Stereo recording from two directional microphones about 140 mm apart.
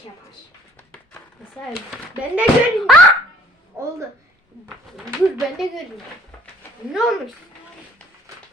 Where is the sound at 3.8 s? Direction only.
20° right (ahead or behind).